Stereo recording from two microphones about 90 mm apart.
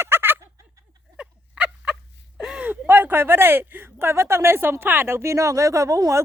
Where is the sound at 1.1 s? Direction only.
10° right (ahead or behind).